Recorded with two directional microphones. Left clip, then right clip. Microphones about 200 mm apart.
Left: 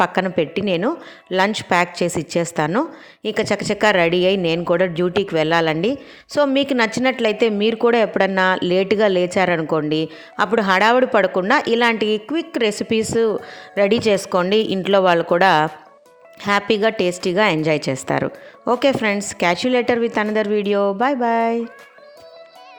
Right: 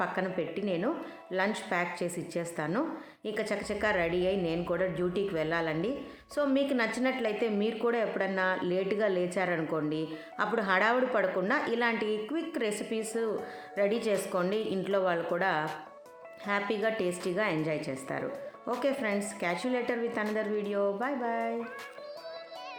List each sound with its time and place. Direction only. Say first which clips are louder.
0.0 s a woman's voice: left 14 dB; 45° left (ahead or behind)